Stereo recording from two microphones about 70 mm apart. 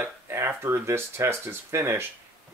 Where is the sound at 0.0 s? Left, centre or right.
Right.